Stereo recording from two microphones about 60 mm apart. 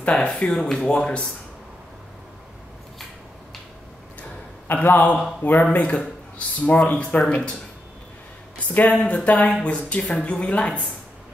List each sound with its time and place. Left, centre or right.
0.0 s speech: centre
4.7 s speech: left
8.5 s speech: left